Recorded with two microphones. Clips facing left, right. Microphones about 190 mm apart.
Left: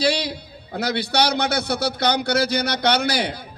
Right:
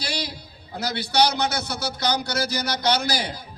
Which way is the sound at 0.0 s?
60° left (ahead or behind).